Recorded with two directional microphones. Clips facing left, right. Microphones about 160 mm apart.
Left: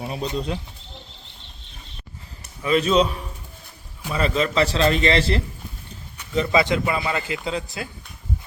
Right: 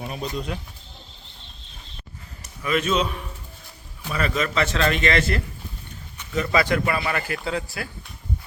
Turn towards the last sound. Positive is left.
turn(degrees=20)  # may be behind; listen again after turning